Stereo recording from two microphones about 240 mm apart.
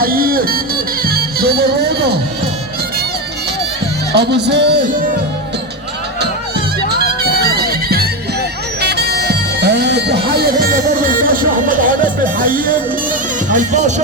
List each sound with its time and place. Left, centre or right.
0.0 s music: right
4.1 s music: right
7.2 s music: right
12.2 s speech: right